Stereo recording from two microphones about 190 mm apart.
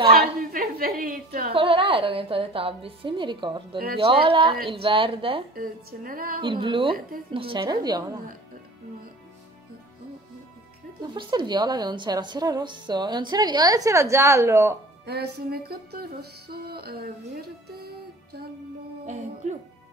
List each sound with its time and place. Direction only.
0.4 s a sound: 50° right (ahead or behind)
1.5 s a woman's voice: 25° right (ahead or behind)
3.7 s speech: 55° right (ahead or behind)
4.0 s a woman's voice: 25° right (ahead or behind)
5.6 s music: 50° right (ahead or behind)
6.4 s a woman's voice: 25° right (ahead or behind)
11.1 s a woman's voice: 25° right (ahead or behind)
15.0 s music: 60° right (ahead or behind)